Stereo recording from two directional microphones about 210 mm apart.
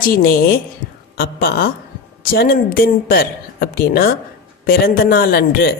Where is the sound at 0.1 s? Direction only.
45° left (ahead or behind).